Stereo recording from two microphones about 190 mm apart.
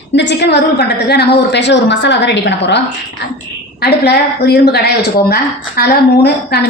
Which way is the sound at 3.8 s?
60° left (ahead or behind).